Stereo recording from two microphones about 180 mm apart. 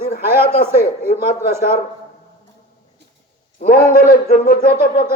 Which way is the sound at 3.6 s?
50° left (ahead or behind).